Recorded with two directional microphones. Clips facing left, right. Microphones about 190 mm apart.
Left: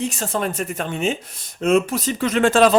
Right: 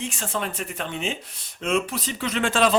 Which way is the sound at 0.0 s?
40° left (ahead or behind).